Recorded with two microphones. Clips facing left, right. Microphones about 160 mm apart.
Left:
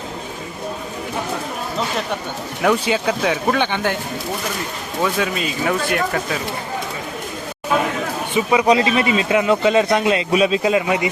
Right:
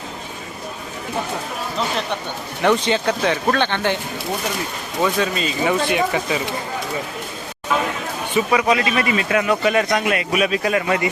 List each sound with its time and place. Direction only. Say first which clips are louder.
2.6 s speech: even; 5° left (ahead or behind)
5.0 s speech: right 1 dB; 5° left (ahead or behind)
8.5 s a man's voice: left 5 dB; 20° left (ahead or behind)